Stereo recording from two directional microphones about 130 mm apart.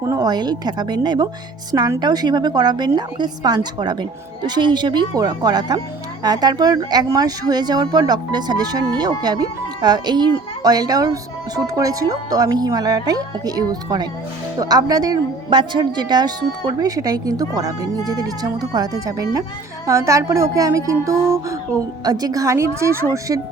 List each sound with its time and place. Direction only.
0.0 s a woman's voice: 25° right (ahead or behind)